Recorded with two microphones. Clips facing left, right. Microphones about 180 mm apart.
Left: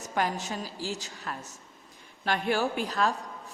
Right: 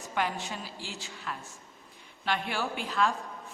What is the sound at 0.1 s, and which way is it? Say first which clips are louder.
A woman's voice: left 2 dB; 40° left (ahead or behind).